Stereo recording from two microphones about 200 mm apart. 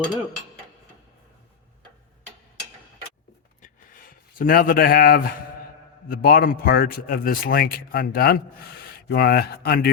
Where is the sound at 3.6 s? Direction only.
45° left (ahead or behind).